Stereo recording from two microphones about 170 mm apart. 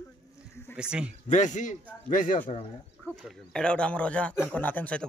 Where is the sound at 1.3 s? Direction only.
45° left (ahead or behind).